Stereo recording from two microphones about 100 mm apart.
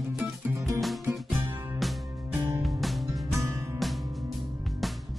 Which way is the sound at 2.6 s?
Centre (ahead or behind).